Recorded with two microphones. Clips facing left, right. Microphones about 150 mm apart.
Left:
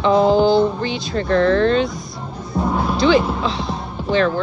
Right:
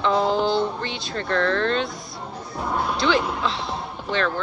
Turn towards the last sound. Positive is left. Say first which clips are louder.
# left 7 dB
turn(degrees=0)  # may be behind; listen again after turning